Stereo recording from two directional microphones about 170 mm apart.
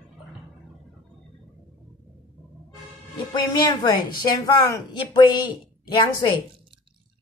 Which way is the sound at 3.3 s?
25° left (ahead or behind).